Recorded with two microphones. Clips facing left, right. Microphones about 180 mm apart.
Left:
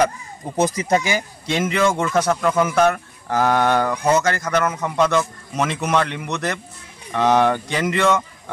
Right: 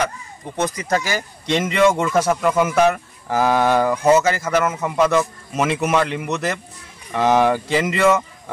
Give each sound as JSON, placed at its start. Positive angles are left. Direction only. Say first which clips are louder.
{"t": 0.6, "sound": "speech", "louder": "left 3 dB", "side_deg": 25}
{"t": 1.4, "sound": "speech", "louder": "right 4 dB", "side_deg": 0}